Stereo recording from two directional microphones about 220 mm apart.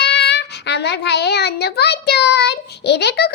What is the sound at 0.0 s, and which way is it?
A child's voice, 50° left (ahead or behind).